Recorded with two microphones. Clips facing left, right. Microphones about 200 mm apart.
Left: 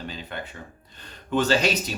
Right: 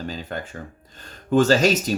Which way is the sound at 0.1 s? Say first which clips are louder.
Right 5 dB; 40° right (ahead or behind).